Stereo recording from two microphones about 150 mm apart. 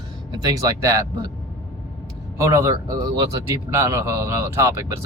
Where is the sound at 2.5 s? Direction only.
20° right (ahead or behind).